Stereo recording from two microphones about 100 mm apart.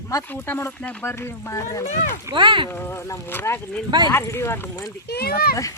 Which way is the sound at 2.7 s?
20° left (ahead or behind).